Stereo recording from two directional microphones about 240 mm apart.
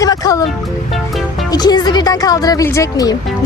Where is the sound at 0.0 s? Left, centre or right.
Centre.